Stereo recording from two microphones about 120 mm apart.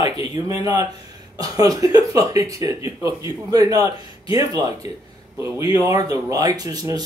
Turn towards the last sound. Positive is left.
turn(degrees=-30)  # may be behind; listen again after turning